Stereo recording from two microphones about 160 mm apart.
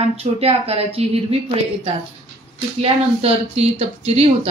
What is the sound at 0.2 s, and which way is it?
A woman's voice, 40° right (ahead or behind).